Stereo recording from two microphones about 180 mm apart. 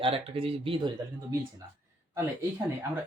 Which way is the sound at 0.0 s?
30° right (ahead or behind).